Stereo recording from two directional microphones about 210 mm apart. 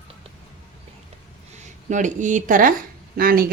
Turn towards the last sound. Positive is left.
turn(degrees=-45)  # may be behind; listen again after turning